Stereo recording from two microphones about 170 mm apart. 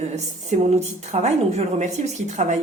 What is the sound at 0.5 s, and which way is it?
A woman's voice, 45° right (ahead or behind).